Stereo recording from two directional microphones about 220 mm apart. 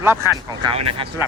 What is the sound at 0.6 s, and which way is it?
Speech, 25° right (ahead or behind).